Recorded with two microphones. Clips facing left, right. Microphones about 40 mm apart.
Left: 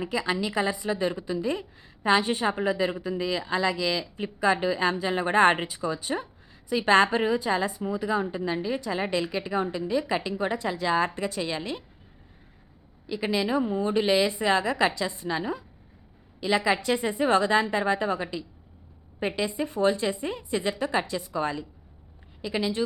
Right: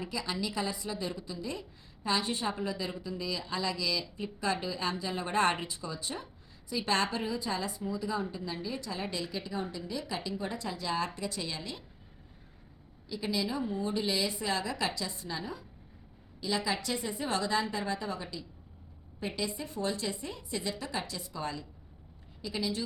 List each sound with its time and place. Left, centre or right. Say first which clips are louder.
0.0 s a woman's voice: left 8 dB; left
9.7 s a woman's voice: left 11 dB; left
10.2 s a woman's voice: left 8 dB; left
11.0 s a woman's voice: left 8 dB; left
13.1 s a woman's voice: left 7 dB; left
19.5 s a woman's voice: left 10 dB; left